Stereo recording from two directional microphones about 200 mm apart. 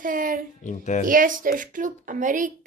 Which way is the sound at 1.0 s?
45° right (ahead or behind).